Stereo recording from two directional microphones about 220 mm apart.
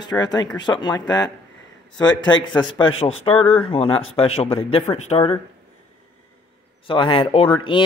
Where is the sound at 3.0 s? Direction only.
20° left (ahead or behind).